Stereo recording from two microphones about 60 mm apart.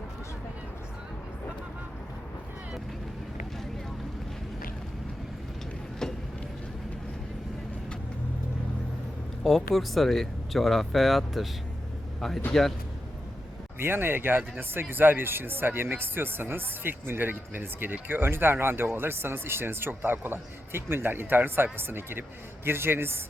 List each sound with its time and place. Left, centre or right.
6.0 s a sound: centre
9.4 s speech: centre
12.5 s speech: centre
13.7 s speech: right